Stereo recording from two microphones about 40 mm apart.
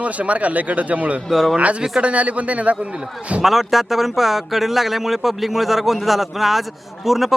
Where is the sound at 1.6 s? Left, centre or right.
Right.